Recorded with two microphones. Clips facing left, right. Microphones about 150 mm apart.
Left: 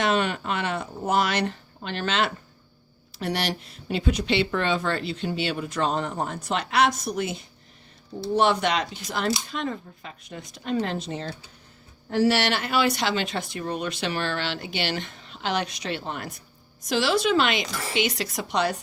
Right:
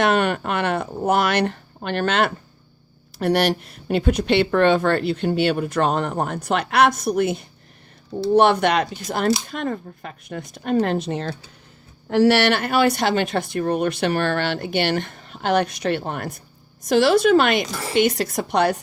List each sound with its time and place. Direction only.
0.0 s speech: 60° right (ahead or behind)